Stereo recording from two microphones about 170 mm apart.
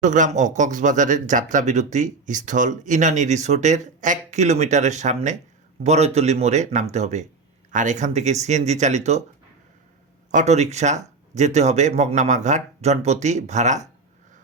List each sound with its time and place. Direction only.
0.0 s a man's voice: 45° right (ahead or behind)
10.3 s a man's voice: 40° right (ahead or behind)